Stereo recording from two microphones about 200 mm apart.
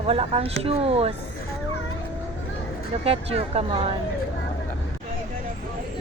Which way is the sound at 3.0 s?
30° right (ahead or behind).